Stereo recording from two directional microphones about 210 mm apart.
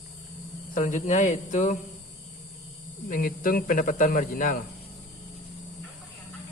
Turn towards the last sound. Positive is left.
turn(degrees=40)  # may be behind; listen again after turning